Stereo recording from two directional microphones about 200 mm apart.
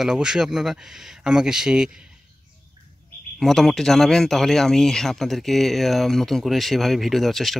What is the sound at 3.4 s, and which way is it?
Speech, centre (ahead or behind).